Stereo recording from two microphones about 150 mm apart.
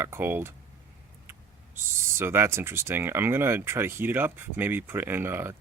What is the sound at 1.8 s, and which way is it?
Speech, 15° right (ahead or behind).